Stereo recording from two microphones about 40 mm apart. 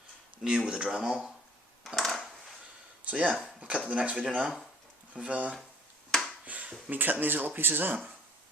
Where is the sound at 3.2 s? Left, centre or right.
Right.